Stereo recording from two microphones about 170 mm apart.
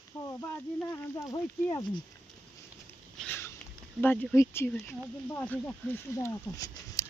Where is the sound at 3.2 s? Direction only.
10° left (ahead or behind).